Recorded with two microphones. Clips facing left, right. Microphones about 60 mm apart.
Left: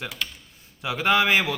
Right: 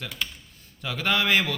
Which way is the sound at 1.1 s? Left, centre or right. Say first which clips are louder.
Left 2 dB; centre.